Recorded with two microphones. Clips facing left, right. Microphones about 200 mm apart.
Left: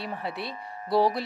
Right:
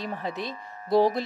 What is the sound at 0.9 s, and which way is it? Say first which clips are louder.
Speech: right 2 dB; 45° right (ahead or behind).